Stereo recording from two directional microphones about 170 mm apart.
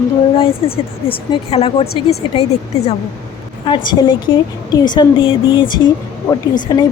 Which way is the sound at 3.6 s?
25° left (ahead or behind).